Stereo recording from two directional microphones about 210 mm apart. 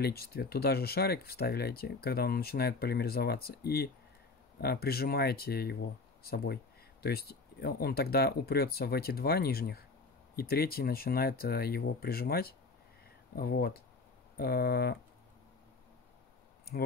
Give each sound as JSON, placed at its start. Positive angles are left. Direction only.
{"t": 0.0, "sound": "speech", "side_deg": 50}
{"t": 16.7, "sound": "speech", "side_deg": 45}